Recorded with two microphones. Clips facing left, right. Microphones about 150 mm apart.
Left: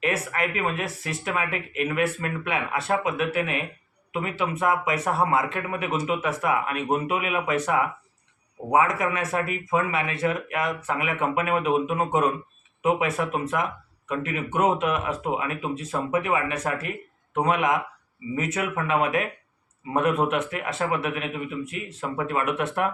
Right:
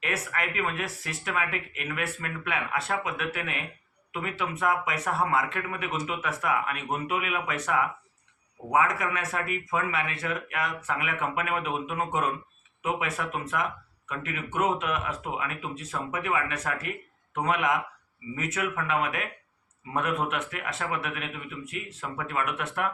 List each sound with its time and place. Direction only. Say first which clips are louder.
0.0 s speech: left 6 dB; 20° left (ahead or behind)
8.7 s speech: left 4 dB; 20° left (ahead or behind)